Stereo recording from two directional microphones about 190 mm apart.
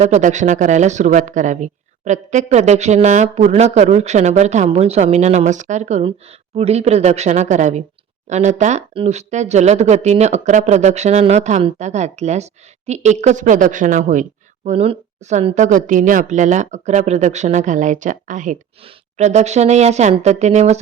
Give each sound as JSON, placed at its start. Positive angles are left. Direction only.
{"t": 0.0, "sound": "speech", "side_deg": -40}